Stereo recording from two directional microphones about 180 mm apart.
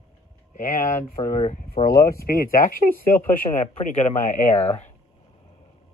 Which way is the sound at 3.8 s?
45° left (ahead or behind).